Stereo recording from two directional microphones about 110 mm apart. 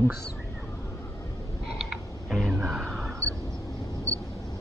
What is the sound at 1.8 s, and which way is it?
Tick, centre (ahead or behind).